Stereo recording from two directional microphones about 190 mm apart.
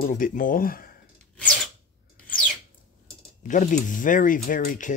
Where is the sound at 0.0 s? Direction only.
45° left (ahead or behind).